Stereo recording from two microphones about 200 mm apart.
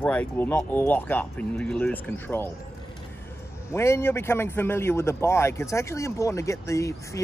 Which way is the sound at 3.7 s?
15° left (ahead or behind).